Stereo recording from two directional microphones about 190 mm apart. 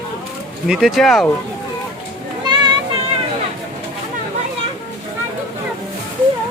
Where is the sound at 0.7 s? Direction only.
Centre (ahead or behind).